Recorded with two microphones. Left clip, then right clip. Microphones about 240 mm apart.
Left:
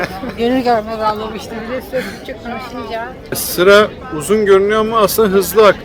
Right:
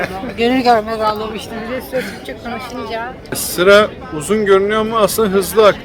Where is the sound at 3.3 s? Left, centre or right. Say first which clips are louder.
Left 1 dB; centre.